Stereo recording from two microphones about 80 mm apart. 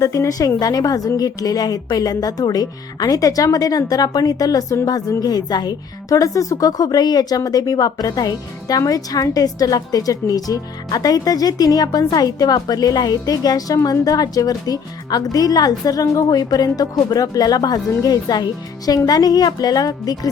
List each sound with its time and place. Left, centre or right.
0.0 s a woman's voice: left